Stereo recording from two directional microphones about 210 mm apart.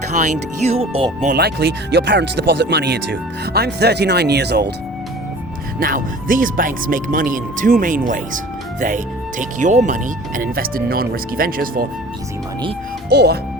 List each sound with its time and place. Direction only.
0.2 s speech: 30° right (ahead or behind)
1.3 s speech: 50° right (ahead or behind)
5.8 s speech: 40° right (ahead or behind)
9.4 s speech: 35° right (ahead or behind)
13.1 s speech: 50° right (ahead or behind)